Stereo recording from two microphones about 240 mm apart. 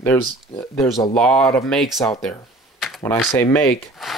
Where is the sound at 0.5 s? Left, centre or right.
Centre.